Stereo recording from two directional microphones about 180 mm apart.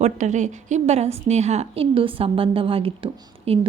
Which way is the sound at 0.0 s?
40° right (ahead or behind).